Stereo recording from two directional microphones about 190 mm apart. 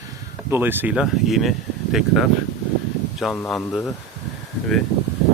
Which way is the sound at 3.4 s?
5° left (ahead or behind).